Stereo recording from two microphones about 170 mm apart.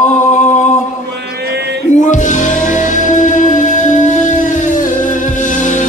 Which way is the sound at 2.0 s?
45° left (ahead or behind).